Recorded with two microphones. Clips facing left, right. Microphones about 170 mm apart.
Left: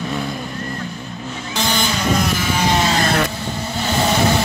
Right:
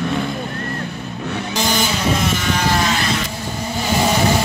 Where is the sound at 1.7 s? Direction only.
Centre (ahead or behind).